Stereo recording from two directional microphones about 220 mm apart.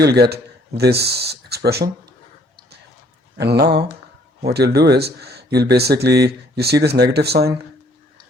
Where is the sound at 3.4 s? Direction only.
45° right (ahead or behind).